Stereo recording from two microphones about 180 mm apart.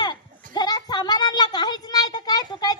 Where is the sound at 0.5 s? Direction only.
25° left (ahead or behind).